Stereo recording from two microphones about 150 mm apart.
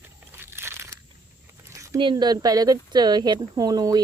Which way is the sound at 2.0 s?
30° right (ahead or behind).